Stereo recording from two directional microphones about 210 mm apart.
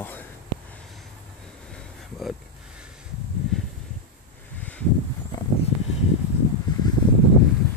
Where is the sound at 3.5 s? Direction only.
Centre (ahead or behind).